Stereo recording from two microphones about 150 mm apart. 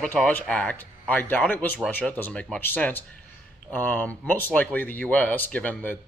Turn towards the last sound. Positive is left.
turn(degrees=10)  # may be behind; listen again after turning